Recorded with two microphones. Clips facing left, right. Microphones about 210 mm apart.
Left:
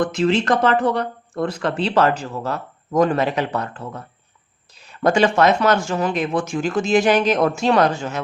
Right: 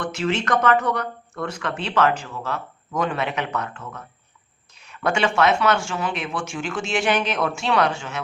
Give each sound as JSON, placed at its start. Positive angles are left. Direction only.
{"t": 0.0, "sound": "speech", "side_deg": 35}